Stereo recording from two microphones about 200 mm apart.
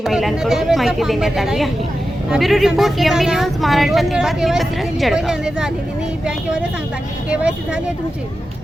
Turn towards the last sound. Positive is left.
turn(degrees=-5)  # may be behind; listen again after turning